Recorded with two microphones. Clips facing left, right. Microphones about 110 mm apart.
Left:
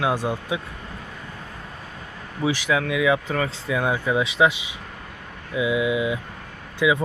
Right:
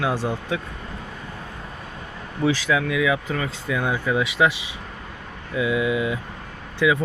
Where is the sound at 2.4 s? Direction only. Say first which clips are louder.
Right 1 dB; 15° left (ahead or behind).